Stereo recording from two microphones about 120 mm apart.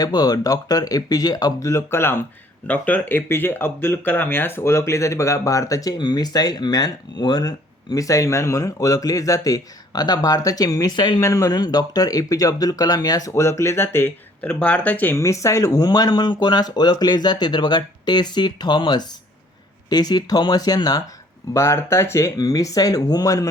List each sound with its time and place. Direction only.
0.0 s speech: 35° left (ahead or behind)
21.5 s speech: 20° left (ahead or behind)